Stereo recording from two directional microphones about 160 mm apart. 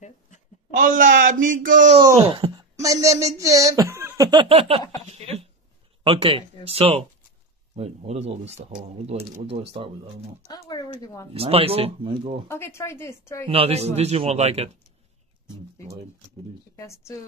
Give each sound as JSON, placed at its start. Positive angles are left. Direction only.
{"t": 0.7, "sound": "speech", "side_deg": -55}
{"t": 2.1, "sound": "wail", "side_deg": -35}
{"t": 2.7, "sound": "speech", "side_deg": -20}
{"t": 10.5, "sound": "speech", "side_deg": 25}
{"t": 11.3, "sound": "speech", "side_deg": -35}
{"t": 12.4, "sound": "a woman's voice", "side_deg": 15}
{"t": 13.5, "sound": "speech", "side_deg": -40}
{"t": 16.7, "sound": "speech", "side_deg": 20}